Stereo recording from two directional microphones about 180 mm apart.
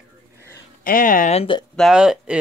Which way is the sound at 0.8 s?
50° left (ahead or behind).